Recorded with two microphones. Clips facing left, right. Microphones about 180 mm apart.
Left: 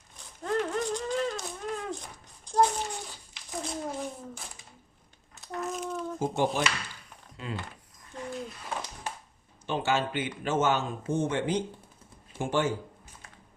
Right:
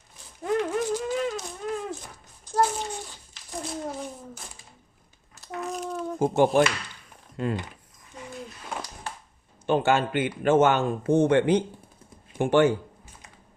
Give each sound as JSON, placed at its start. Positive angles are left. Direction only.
{"t": 0.4, "sound": "a sound", "side_deg": -10}
{"t": 6.1, "sound": "a man's voice", "side_deg": -55}
{"t": 9.6, "sound": "a man's voice", "side_deg": -55}